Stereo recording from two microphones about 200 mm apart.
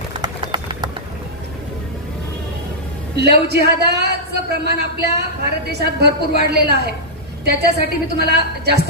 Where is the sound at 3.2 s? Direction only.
55° right (ahead or behind).